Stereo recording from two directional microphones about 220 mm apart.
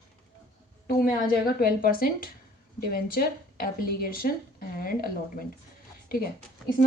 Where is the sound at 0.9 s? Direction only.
40° left (ahead or behind).